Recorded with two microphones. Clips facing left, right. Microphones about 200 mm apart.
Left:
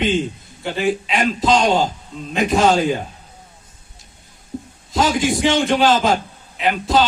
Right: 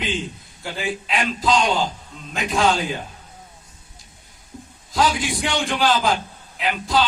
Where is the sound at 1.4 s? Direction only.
45° left (ahead or behind).